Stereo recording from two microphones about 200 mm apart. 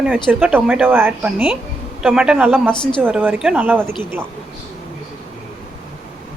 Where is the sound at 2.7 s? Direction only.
25° left (ahead or behind).